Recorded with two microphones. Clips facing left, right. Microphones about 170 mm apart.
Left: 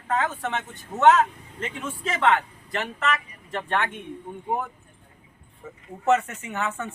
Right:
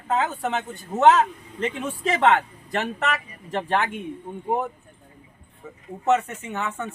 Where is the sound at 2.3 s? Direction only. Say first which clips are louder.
Right 2 dB; 45° right (ahead or behind).